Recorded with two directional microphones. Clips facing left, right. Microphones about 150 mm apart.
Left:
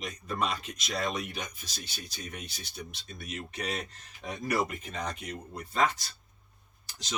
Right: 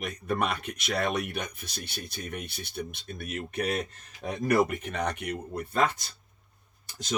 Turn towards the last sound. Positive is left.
turn(degrees=-50)  # may be behind; listen again after turning